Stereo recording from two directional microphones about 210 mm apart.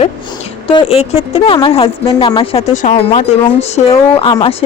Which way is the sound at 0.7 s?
25° left (ahead or behind).